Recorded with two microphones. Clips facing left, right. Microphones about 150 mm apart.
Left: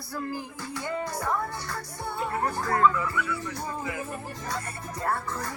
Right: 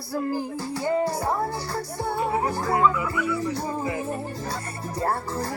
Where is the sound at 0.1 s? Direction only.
35° right (ahead or behind).